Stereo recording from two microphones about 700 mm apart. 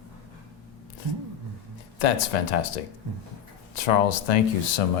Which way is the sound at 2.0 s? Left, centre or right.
Left.